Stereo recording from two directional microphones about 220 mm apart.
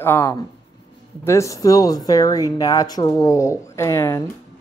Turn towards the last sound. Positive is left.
turn(degrees=10)  # may be behind; listen again after turning